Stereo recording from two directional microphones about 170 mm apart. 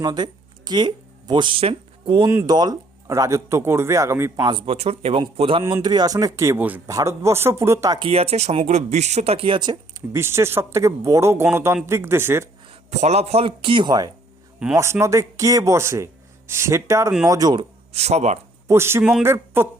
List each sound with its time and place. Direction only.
0.0 s speech: 25° right (ahead or behind)
2.2 s speech: 20° right (ahead or behind)
8.0 s speech: 35° right (ahead or behind); by 12.5 s 15° right (ahead or behind)
12.6 s speech: 40° right (ahead or behind)
18.7 s speech: 15° right (ahead or behind)